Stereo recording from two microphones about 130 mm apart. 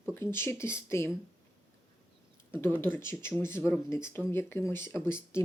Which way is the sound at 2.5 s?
20° left (ahead or behind).